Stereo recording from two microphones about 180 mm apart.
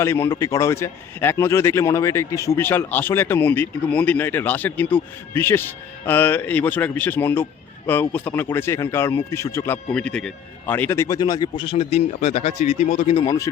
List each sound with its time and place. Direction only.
0.0 s a man's voice: 15° left (ahead or behind); by 13.1 s 40° left (ahead or behind)
13.1 s speech: 20° left (ahead or behind)